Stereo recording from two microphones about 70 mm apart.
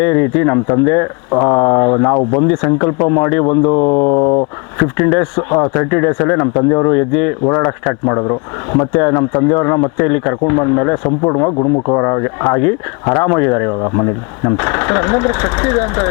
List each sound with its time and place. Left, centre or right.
0.0 s speech: left